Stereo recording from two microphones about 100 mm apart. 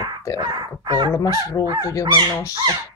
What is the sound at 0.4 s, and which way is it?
Speech, 45° right (ahead or behind).